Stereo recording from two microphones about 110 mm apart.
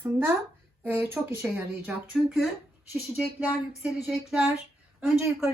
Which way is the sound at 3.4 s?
5° right (ahead or behind).